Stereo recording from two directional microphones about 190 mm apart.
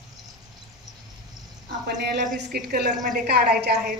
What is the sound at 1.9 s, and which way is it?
A woman's voice, 60° right (ahead or behind).